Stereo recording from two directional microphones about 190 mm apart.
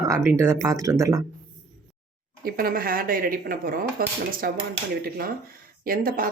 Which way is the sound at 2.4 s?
50° right (ahead or behind).